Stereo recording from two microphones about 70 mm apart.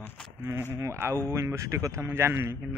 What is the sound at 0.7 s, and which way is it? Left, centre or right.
Speech, right.